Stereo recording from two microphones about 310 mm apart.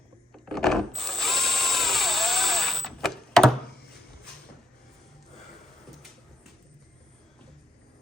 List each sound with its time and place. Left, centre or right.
0.4 s drill: centre